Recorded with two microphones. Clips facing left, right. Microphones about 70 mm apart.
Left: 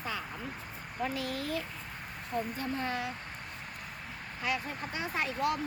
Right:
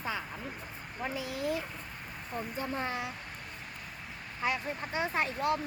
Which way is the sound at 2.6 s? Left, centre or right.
Right.